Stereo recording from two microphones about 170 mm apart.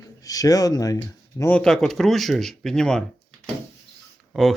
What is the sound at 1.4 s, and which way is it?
Speech, 10° left (ahead or behind).